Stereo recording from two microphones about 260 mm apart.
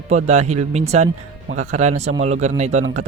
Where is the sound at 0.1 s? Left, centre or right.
Right.